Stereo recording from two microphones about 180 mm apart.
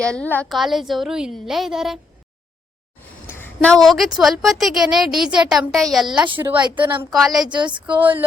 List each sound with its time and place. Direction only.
0.0 s speech: 5° left (ahead or behind)
3.2 s a woman's voice: 10° left (ahead or behind)
7.4 s speech: 25° right (ahead or behind)